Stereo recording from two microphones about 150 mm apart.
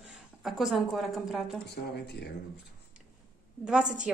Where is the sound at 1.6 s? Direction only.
90° left.